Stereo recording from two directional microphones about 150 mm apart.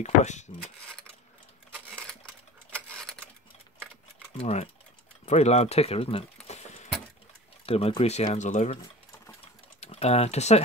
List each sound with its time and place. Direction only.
0.0 s speech: 50° left (ahead or behind)
2.0 s a sound: 5° left (ahead or behind)
4.4 s speech: 45° left (ahead or behind)
9.8 s speech: 45° left (ahead or behind)